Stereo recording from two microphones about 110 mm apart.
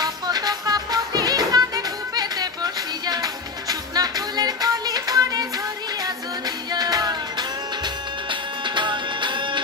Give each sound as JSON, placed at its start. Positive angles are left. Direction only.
{"t": 0.0, "sound": "music", "side_deg": -35}
{"t": 6.7, "sound": "music", "side_deg": -35}